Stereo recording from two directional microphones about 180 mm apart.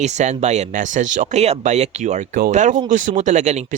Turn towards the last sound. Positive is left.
turn(degrees=-40)  # may be behind; listen again after turning